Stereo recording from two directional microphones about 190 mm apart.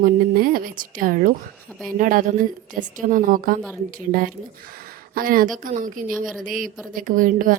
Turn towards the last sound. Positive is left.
turn(degrees=-45)  # may be behind; listen again after turning